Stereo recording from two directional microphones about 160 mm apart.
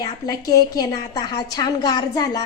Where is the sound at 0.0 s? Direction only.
20° left (ahead or behind).